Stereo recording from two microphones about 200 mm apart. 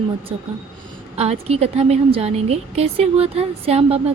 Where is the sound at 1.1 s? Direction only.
30° right (ahead or behind).